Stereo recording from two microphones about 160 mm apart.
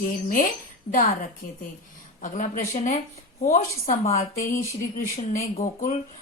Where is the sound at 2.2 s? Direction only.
55° left (ahead or behind).